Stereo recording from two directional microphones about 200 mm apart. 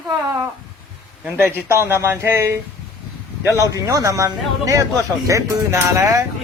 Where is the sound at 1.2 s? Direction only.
10° right (ahead or behind).